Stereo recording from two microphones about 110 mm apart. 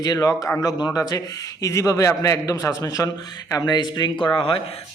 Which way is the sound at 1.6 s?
30° left (ahead or behind).